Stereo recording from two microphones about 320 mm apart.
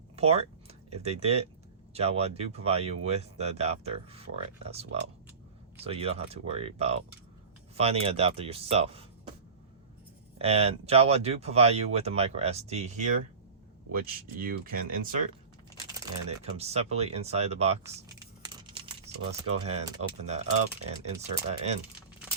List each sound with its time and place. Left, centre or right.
0.2 s speech: centre
10.3 s speech: centre
14.3 s speech: right
18.4 s computer keyboard: centre
19.2 s speech: centre